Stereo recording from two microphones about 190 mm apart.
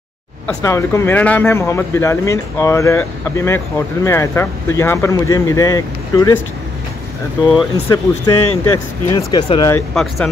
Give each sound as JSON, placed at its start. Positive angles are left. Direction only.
{"t": 0.6, "sound": "speech", "side_deg": 15}
{"t": 7.5, "sound": "speech", "side_deg": 25}
{"t": 9.9, "sound": "speech", "side_deg": 0}